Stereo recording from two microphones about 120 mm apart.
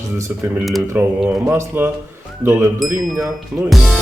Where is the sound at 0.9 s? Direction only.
15° right (ahead or behind).